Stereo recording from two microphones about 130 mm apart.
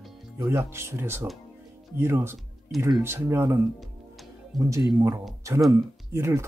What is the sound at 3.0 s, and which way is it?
Speech, 20° right (ahead or behind).